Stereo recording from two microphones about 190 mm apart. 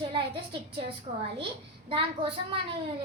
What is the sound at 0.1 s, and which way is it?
A woman's voice, 25° right (ahead or behind).